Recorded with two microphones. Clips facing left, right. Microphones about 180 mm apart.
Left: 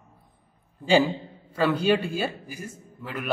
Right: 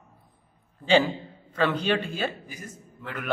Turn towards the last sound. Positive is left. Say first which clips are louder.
# left 2 dB
turn(degrees=10)  # may be behind; listen again after turning